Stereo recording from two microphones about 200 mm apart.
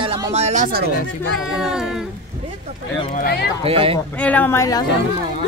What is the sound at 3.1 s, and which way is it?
Speech, 50° left (ahead or behind).